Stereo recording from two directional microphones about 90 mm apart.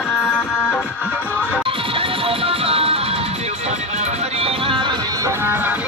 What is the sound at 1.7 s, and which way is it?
Music, 90° right.